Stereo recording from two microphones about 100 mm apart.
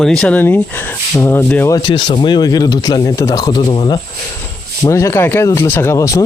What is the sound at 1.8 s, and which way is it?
Speech, 50° left (ahead or behind).